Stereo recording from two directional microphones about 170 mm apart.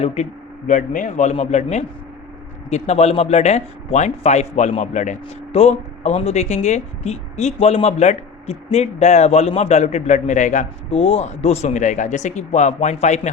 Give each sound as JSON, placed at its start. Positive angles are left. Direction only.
{"t": 0.0, "sound": "speech", "side_deg": 40}
{"t": 0.7, "sound": "a man's voice", "side_deg": 50}